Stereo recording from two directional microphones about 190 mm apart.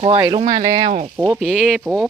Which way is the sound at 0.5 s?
20° right (ahead or behind).